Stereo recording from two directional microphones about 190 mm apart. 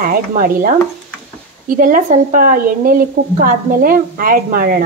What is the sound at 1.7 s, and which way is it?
Speech, 45° right (ahead or behind).